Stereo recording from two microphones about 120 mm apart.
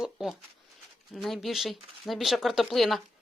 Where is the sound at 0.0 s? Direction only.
Centre (ahead or behind).